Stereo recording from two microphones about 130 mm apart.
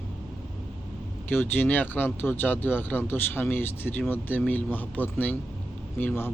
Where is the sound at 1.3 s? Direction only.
15° left (ahead or behind).